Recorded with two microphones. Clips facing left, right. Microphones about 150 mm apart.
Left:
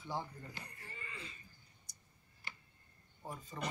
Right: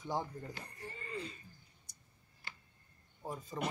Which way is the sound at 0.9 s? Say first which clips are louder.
Right 8 dB; 40° right (ahead or behind).